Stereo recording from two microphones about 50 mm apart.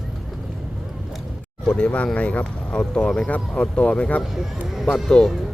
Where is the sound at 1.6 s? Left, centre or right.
Centre.